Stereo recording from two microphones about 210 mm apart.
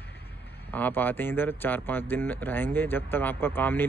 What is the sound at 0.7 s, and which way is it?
Speech, 10° left (ahead or behind).